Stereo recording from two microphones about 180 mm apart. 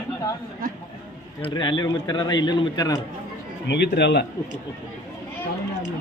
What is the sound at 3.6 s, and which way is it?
Speech, 70° left (ahead or behind).